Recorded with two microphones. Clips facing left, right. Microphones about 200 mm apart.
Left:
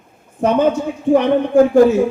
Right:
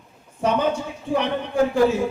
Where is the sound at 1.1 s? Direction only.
45° left (ahead or behind).